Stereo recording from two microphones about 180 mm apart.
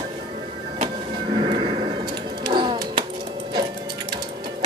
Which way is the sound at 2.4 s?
25° right (ahead or behind).